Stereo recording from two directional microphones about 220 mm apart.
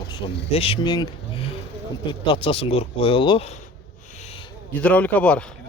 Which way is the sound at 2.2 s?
25° left (ahead or behind).